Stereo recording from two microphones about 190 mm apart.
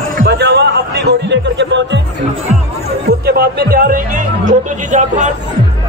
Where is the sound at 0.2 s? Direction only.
65° right (ahead or behind).